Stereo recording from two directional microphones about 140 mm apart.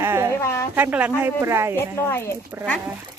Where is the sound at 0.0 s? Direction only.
20° right (ahead or behind).